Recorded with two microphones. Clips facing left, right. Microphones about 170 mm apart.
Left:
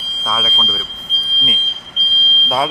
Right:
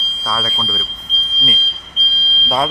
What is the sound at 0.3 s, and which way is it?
Speech, 5° left (ahead or behind).